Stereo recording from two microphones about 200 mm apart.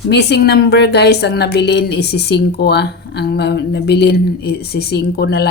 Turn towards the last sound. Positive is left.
turn(degrees=55)  # may be behind; listen again after turning